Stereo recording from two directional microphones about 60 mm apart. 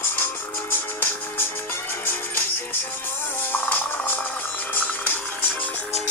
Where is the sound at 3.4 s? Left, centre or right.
Left.